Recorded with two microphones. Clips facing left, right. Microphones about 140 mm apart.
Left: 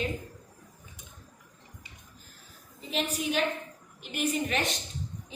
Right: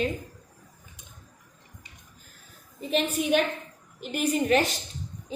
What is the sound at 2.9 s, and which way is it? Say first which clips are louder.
Speech: right 6 dB; 60° right (ahead or behind).